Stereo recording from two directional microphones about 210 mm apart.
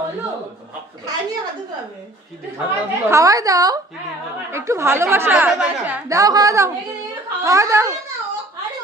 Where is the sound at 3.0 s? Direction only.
15° right (ahead or behind).